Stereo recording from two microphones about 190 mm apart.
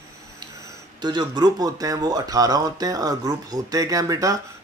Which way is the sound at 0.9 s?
25° right (ahead or behind).